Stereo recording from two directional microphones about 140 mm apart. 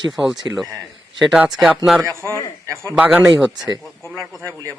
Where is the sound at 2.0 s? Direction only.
20° right (ahead or behind).